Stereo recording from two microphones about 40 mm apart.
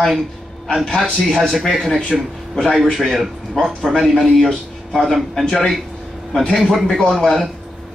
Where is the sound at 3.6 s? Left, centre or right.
Centre.